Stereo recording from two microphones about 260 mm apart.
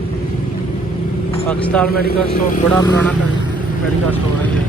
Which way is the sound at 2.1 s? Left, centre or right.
Left.